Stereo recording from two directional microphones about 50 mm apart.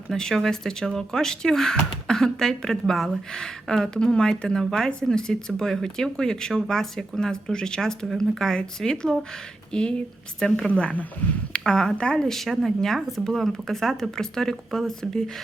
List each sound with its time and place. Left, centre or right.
0.1 s speech: centre
12.3 s speech: centre